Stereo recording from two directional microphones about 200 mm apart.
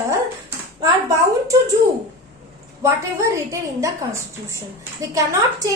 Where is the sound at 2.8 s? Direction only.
15° right (ahead or behind).